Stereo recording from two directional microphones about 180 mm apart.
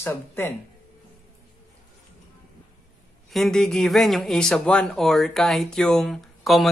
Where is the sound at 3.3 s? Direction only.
Centre (ahead or behind).